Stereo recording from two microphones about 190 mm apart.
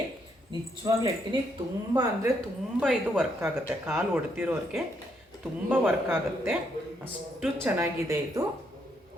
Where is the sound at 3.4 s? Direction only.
15° right (ahead or behind).